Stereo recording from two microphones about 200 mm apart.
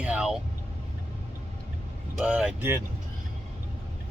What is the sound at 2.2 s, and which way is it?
Speech, 5° right (ahead or behind).